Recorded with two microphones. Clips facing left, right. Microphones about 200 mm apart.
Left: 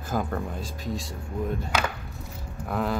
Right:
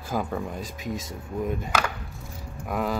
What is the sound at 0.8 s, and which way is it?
Speech, 20° right (ahead or behind).